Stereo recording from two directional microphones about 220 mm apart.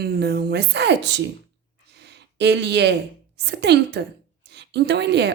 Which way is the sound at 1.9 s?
50° right (ahead or behind).